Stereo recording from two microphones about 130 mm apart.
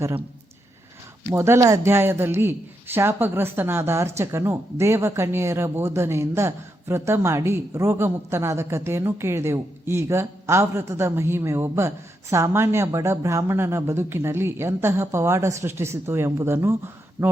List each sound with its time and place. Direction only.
1.3 s speech: 20° right (ahead or behind)